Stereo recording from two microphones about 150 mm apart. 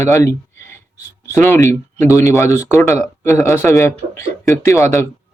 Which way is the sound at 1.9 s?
20° left (ahead or behind).